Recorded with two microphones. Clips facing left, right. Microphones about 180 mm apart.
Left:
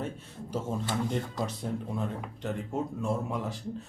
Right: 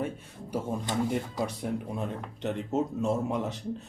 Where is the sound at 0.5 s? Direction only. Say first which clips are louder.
Right 1 dB; 10° right (ahead or behind).